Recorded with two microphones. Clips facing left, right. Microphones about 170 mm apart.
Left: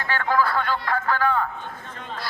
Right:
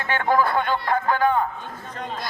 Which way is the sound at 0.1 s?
20° right (ahead or behind).